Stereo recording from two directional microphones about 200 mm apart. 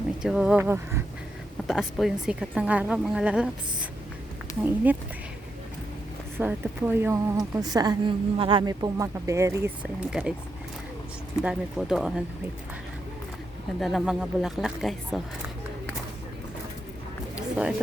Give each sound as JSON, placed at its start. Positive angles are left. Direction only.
{"t": 0.2, "sound": "a woman's voice", "side_deg": -5}
{"t": 1.6, "sound": "a woman's voice", "side_deg": 0}
{"t": 4.6, "sound": "a woman's voice", "side_deg": -10}
{"t": 6.3, "sound": "a woman's voice", "side_deg": -10}
{"t": 11.4, "sound": "a woman's voice", "side_deg": 0}
{"t": 13.7, "sound": "a woman's voice", "side_deg": 0}
{"t": 17.3, "sound": "a sound", "side_deg": -5}